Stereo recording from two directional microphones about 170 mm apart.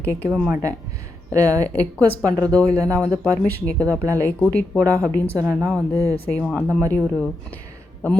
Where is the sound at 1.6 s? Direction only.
10° left (ahead or behind).